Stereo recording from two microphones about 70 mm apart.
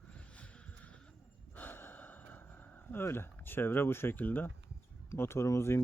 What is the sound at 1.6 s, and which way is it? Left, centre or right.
Sigh, left.